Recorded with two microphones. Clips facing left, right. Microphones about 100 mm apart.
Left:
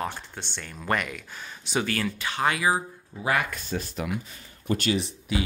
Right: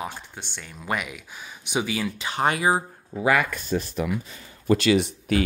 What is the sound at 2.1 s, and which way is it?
Speech, 20° right (ahead or behind).